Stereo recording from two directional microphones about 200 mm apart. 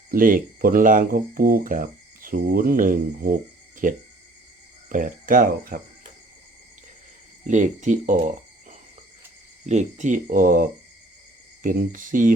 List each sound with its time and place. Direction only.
0.1 s speech: 45° right (ahead or behind)
7.4 s speech: 35° right (ahead or behind)
9.6 s speech: 35° right (ahead or behind)